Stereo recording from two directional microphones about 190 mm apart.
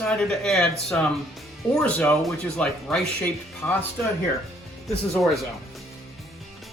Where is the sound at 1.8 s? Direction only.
5° left (ahead or behind).